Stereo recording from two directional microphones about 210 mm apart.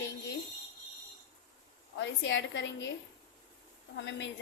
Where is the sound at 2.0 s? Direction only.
60° left (ahead or behind).